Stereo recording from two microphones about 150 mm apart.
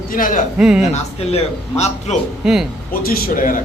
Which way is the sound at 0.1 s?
65° left (ahead or behind).